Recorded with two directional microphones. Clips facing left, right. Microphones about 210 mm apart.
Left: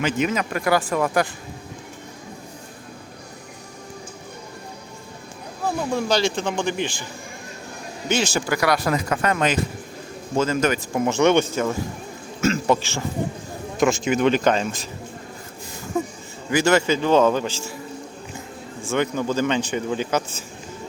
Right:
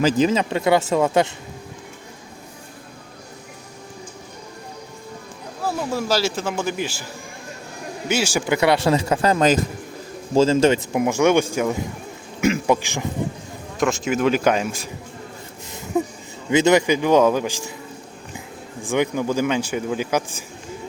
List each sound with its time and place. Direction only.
0.0 s speech: 35° right (ahead or behind)
5.6 s a man's voice: 5° right (ahead or behind)
8.0 s a man's voice: 10° right (ahead or behind)
8.5 s speech: 25° right (ahead or behind)
10.3 s speech: 30° right (ahead or behind)
11.0 s a man's voice: 10° right (ahead or behind)
13.7 s speech: centre (ahead or behind)
15.9 s a sound: 5° right (ahead or behind)
16.5 s a man's voice: 20° right (ahead or behind)
18.9 s a man's voice: 10° right (ahead or behind)